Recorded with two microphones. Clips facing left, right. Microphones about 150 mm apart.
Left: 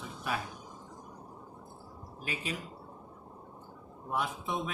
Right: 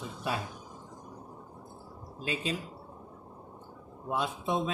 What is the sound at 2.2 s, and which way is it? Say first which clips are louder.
Speech: right 5 dB; 25° right (ahead or behind).